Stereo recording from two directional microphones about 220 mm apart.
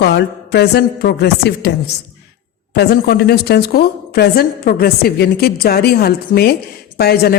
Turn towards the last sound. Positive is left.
turn(degrees=45)  # may be behind; listen again after turning